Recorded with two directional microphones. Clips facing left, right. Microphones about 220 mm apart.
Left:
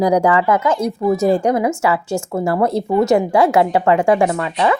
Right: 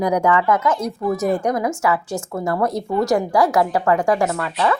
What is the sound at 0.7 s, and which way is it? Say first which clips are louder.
Speech: left 5 dB; 5° left (ahead or behind).